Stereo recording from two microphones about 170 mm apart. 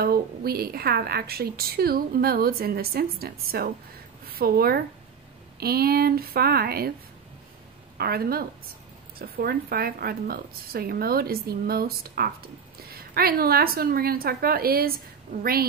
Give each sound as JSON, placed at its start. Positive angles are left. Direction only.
{"t": 0.0, "sound": "a woman's voice", "side_deg": -65}
{"t": 8.0, "sound": "a woman's voice", "side_deg": -65}